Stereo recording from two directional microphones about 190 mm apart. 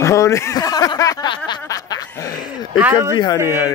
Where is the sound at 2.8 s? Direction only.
10° right (ahead or behind).